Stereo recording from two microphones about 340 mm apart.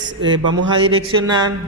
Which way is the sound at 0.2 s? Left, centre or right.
Right.